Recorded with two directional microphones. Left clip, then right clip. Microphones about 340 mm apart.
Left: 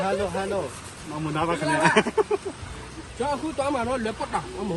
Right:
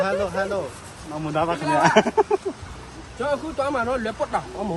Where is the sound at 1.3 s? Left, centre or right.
Right.